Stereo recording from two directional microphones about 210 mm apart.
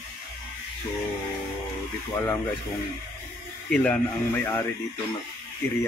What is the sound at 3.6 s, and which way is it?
Speech, 5° left (ahead or behind).